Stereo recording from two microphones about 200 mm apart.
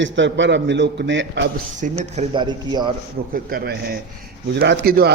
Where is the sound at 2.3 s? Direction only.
25° right (ahead or behind).